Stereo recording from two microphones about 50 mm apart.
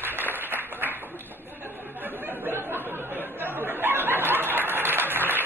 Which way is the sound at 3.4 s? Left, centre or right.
Right.